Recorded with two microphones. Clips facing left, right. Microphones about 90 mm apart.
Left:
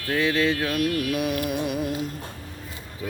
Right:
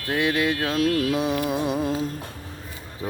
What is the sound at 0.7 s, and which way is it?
Music, 25° right (ahead or behind).